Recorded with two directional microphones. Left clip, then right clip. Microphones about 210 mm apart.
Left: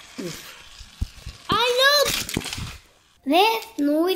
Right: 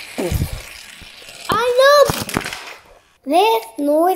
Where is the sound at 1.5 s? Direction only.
15° left (ahead or behind).